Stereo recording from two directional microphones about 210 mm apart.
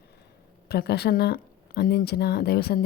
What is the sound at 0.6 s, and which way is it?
Speech, 50° left (ahead or behind).